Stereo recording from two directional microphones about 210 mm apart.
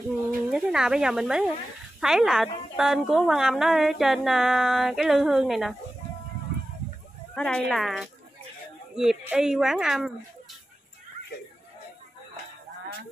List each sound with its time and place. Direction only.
0.5 s a woman's voice: centre (ahead or behind)
7.3 s a woman's voice: 5° left (ahead or behind)